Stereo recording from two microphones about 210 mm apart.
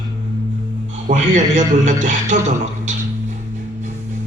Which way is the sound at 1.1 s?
35° right (ahead or behind).